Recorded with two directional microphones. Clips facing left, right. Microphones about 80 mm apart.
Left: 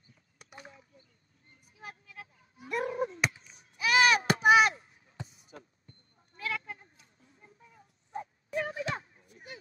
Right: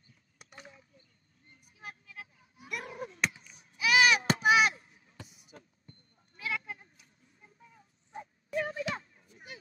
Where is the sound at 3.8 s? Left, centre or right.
Left.